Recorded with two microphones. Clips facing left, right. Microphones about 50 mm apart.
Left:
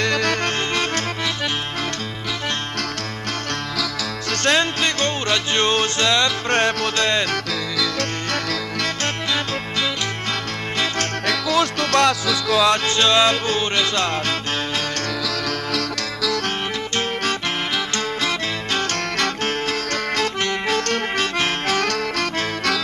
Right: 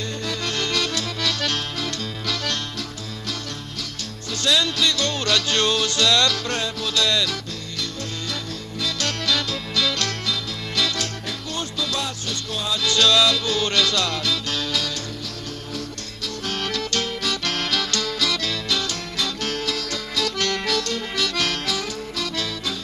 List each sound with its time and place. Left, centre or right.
0.0 s music: left
0.4 s music: left
4.4 s music: left
6.5 s music: left
9.0 s music: left
11.3 s music: left
12.5 s music: left
12.8 s music: left
16.9 s music: left
20.4 s music: left
20.7 s music: left
21.3 s music: left
21.8 s music: left